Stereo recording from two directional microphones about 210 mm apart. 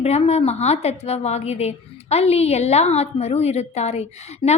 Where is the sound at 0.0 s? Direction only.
30° left (ahead or behind).